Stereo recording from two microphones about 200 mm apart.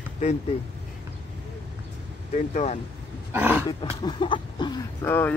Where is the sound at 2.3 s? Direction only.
35° left (ahead or behind).